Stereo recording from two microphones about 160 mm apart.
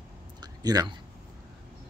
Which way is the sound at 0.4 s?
25° right (ahead or behind).